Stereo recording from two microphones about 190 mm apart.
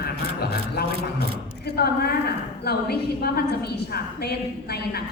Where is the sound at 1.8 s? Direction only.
55° left (ahead or behind).